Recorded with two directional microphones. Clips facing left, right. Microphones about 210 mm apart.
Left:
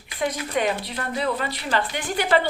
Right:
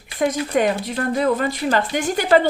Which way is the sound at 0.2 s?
45° right (ahead or behind).